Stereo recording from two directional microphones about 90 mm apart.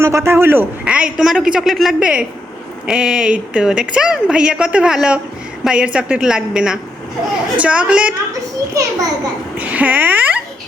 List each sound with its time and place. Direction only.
0.0 s speech: 30° right (ahead or behind)
0.9 s a woman's voice: 10° right (ahead or behind)
8.3 s a child's voice: 40° right (ahead or behind)
9.6 s speech: 15° right (ahead or behind)